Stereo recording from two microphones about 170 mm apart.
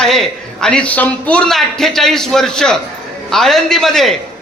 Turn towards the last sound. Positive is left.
turn(degrees=0)  # may be behind; listen again after turning